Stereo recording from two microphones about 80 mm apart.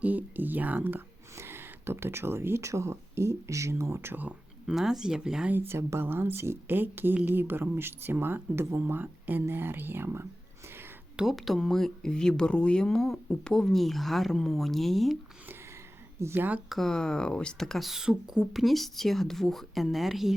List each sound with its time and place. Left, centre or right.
0.0 s speech: right
4.6 s speech: centre
5.5 s speech: right
11.2 s speech: centre
16.2 s speech: right
16.6 s speech: centre